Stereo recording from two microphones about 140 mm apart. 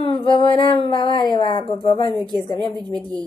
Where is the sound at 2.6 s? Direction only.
30° right (ahead or behind).